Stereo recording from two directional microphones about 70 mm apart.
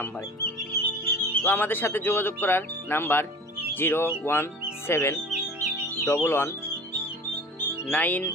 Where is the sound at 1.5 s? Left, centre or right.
Left.